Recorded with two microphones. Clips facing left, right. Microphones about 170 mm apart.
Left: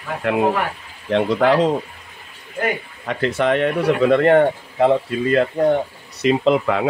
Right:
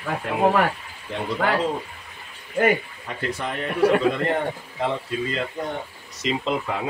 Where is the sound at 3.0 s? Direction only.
85° left.